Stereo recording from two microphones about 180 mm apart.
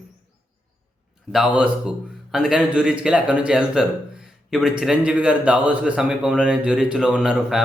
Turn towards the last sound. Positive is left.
turn(degrees=0)  # may be behind; listen again after turning